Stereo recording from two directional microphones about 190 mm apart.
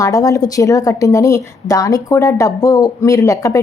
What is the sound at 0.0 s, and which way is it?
Speech, 15° left (ahead or behind).